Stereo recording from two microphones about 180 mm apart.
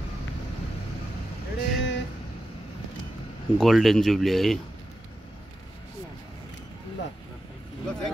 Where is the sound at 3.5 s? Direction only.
Centre (ahead or behind).